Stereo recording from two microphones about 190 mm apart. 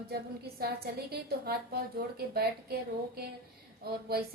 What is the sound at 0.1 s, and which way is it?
A woman's voice, 55° right (ahead or behind).